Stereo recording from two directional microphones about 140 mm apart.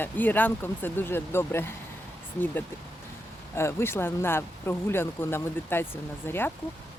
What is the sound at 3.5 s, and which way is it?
Speech, 20° left (ahead or behind).